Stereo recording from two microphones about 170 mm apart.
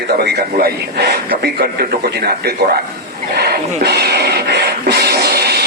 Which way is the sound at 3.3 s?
75° right (ahead or behind).